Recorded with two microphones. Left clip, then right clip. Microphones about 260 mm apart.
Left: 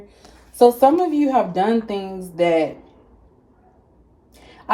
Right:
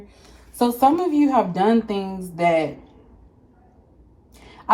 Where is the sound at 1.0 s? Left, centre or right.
Centre.